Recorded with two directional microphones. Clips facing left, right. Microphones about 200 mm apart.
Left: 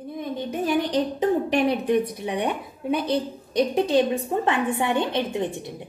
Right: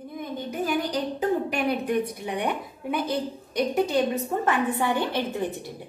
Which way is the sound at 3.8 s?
30° left (ahead or behind).